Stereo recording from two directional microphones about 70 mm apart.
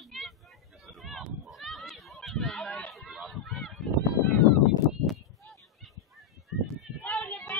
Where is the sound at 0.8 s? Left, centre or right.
Centre.